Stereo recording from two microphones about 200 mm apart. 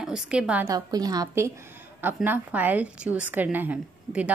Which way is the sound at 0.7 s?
20° right (ahead or behind).